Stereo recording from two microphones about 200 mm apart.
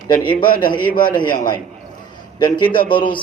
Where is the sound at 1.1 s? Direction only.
20° left (ahead or behind).